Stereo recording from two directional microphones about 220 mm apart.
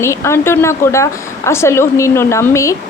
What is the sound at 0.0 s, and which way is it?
A woman's voice, 10° left (ahead or behind).